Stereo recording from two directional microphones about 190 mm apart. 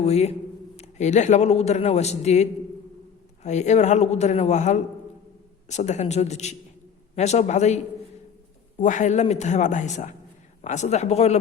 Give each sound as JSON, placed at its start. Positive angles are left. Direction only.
{"t": 0.0, "sound": "a man's voice", "side_deg": 35}
{"t": 8.8, "sound": "a man's voice", "side_deg": 40}